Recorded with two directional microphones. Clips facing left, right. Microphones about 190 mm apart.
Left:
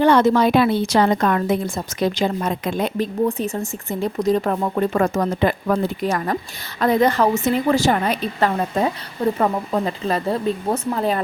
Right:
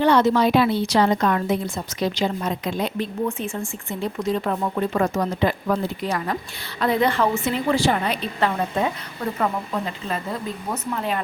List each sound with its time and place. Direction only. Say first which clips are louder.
0.0 s a woman's voice: left 3 dB; 50° left (ahead or behind)
3.2 s a woman's voice: left 4 dB; 40° left (ahead or behind)